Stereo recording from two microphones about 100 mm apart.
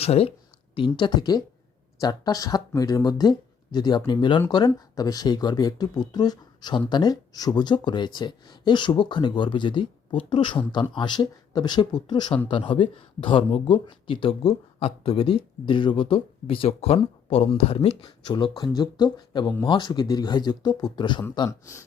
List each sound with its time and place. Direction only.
0.0 s speech: 85° left
0.8 s speech: 50° left (ahead or behind)
13.1 s speech: 70° left (ahead or behind)
13.8 s speech: 55° left (ahead or behind); by 17.9 s 80° left
18.0 s speech: 50° left (ahead or behind)